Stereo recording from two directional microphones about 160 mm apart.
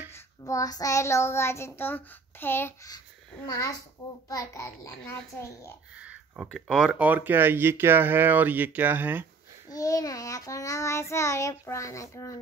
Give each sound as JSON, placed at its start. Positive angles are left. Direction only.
{"t": 0.1, "sound": "child singing", "side_deg": 20}
{"t": 5.9, "sound": "a sound", "side_deg": -10}
{"t": 6.5, "sound": "speech", "side_deg": -5}
{"t": 9.7, "sound": "child singing", "side_deg": 20}